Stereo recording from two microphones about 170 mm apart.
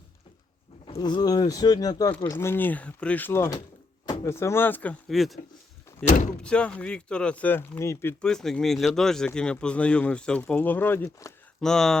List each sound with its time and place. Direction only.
0.9 s speech: 25° left (ahead or behind)
8.2 s speech: 5° left (ahead or behind)
11.6 s speech: 5° left (ahead or behind)